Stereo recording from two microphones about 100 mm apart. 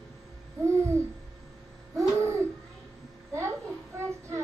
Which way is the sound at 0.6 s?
30° right (ahead or behind).